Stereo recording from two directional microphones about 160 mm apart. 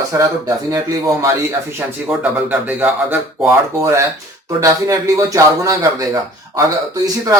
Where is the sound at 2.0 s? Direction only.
10° right (ahead or behind).